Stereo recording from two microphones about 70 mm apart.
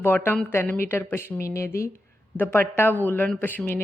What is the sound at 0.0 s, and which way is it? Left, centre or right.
Speech, left.